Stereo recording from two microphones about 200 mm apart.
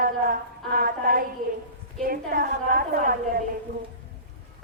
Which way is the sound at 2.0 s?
45° right (ahead or behind).